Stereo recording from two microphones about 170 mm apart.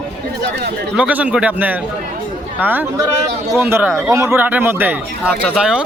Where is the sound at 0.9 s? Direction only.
10° right (ahead or behind).